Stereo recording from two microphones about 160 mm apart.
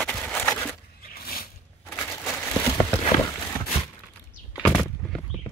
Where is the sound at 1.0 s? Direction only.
70° left (ahead or behind).